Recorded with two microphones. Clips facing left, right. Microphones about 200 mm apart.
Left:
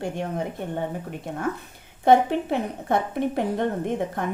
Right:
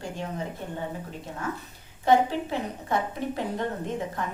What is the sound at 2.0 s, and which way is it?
A woman's voice, 60° left (ahead or behind).